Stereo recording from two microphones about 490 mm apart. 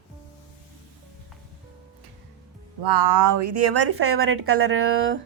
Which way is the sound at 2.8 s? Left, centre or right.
Right.